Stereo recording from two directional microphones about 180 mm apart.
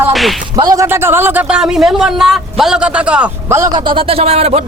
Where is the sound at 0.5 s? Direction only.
20° right (ahead or behind); by 4.6 s 35° right (ahead or behind).